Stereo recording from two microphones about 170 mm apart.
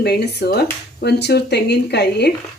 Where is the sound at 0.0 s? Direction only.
75° left (ahead or behind).